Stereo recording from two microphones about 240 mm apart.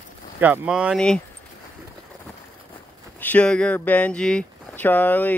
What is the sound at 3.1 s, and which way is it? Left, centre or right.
Speech, centre.